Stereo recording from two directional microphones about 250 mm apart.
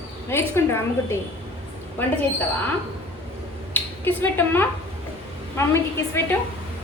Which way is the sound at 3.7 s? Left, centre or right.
Centre.